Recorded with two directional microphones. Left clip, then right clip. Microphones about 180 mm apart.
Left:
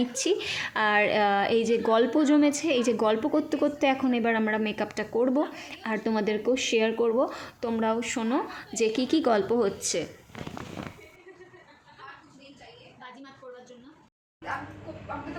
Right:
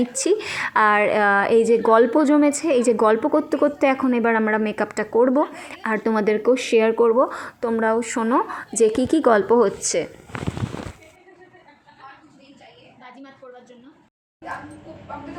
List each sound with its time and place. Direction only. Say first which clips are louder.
0.1 s a woman's voice: right 6 dB; 20° right (ahead or behind)